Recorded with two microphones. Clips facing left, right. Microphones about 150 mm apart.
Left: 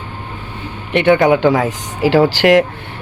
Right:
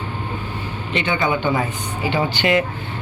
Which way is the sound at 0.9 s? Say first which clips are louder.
Left 10 dB; 65° left (ahead or behind).